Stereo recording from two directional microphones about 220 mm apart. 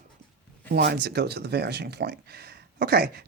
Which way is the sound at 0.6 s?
45° right (ahead or behind).